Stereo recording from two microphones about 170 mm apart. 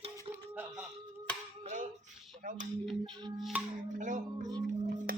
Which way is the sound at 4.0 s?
45° right (ahead or behind).